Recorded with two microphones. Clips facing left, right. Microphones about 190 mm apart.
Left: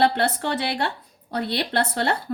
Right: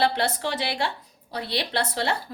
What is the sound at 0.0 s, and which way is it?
A woman's voice, 60° left (ahead or behind).